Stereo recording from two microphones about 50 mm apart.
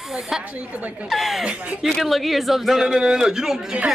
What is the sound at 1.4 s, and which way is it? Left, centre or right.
Speech, centre.